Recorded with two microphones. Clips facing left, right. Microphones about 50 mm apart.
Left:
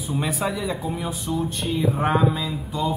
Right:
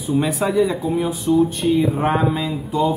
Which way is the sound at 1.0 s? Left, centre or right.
Centre.